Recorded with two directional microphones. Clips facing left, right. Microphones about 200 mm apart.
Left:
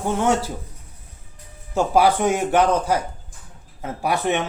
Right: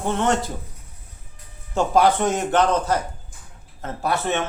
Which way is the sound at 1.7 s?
10° left (ahead or behind).